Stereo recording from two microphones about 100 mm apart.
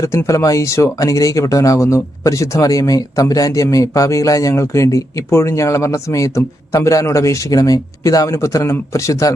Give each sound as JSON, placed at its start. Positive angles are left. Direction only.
{"t": 0.0, "sound": "speech", "side_deg": 30}